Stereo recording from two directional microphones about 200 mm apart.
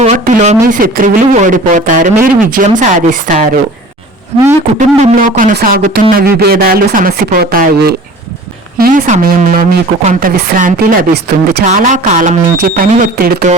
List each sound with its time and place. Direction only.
0.0 s a sound: 35° right (ahead or behind)
0.7 s a woman's voice: 40° right (ahead or behind)
4.9 s a woman's voice: 40° right (ahead or behind)